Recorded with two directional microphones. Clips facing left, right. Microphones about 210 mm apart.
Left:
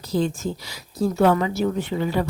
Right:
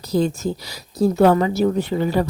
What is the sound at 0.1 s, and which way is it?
Speech, 40° right (ahead or behind).